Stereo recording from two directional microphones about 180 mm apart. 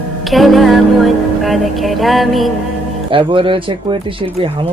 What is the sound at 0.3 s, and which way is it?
Music, centre (ahead or behind).